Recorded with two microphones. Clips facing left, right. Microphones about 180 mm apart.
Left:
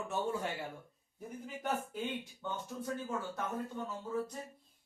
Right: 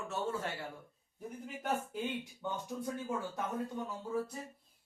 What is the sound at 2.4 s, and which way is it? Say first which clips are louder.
Speech: right 2 dB; 15° right (ahead or behind).